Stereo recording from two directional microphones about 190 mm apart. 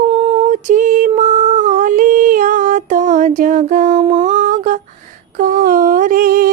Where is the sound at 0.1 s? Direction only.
30° right (ahead or behind).